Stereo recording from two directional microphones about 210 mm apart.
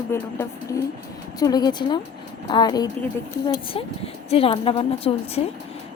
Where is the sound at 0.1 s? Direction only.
10° left (ahead or behind).